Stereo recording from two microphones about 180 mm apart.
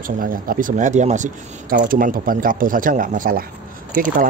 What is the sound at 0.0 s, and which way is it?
Speech, 50° right (ahead or behind).